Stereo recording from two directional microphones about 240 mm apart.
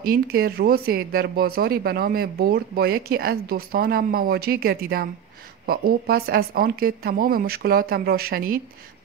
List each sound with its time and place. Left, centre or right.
0.0 s speech: right